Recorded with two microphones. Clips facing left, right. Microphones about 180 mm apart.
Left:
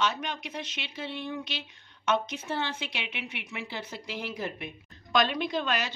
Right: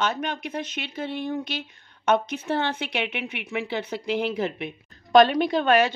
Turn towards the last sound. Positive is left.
turn(degrees=-55)  # may be behind; listen again after turning